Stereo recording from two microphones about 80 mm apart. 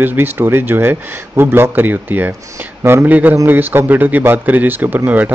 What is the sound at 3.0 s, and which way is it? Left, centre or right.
A man's voice, right.